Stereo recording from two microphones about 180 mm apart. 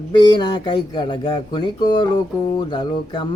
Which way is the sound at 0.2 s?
25° left (ahead or behind).